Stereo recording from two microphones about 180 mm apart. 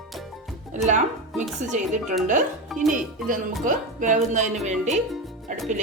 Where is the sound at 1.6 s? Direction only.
40° right (ahead or behind).